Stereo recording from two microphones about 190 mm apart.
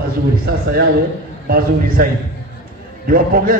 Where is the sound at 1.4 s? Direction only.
50° right (ahead or behind).